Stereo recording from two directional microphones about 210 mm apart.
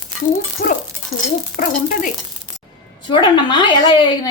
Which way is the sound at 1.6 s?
40° left (ahead or behind).